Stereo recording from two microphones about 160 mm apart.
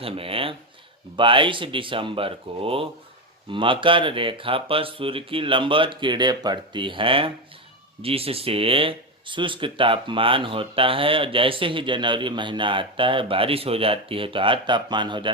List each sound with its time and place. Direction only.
0.0 s speech: 35° right (ahead or behind)